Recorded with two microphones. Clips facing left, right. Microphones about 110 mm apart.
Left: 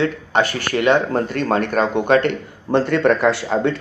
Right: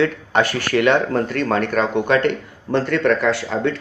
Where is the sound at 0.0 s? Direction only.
30° left (ahead or behind).